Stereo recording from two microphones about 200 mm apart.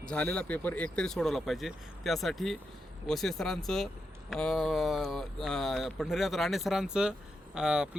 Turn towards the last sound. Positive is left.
turn(degrees=-5)  # may be behind; listen again after turning